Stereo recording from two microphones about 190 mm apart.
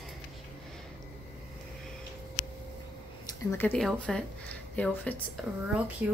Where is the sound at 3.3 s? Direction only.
10° left (ahead or behind).